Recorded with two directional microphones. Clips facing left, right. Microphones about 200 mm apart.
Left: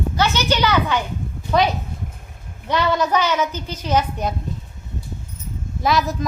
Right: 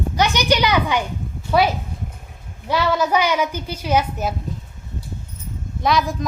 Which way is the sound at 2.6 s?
5° right (ahead or behind).